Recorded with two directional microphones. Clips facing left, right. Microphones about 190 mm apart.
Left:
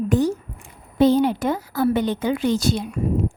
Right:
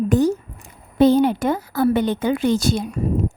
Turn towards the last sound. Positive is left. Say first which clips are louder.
# right 1 dB
turn(degrees=-45)  # may be behind; listen again after turning